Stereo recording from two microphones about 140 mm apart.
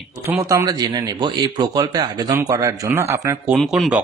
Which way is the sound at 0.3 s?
20° right (ahead or behind).